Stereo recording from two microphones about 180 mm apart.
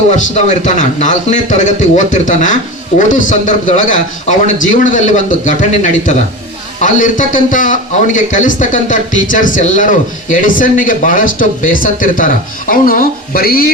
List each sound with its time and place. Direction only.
0.1 s a man's voice: 45° left (ahead or behind)